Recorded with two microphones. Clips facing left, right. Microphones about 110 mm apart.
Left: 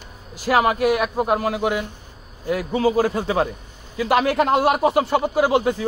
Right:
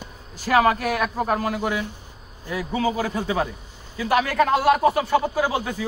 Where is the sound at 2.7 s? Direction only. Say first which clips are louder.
Left 4 dB; 35° left (ahead or behind).